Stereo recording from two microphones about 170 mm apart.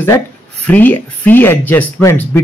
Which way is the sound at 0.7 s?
10° left (ahead or behind).